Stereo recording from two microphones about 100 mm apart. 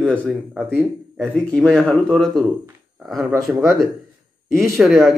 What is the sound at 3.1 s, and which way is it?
Speech, 35° right (ahead or behind).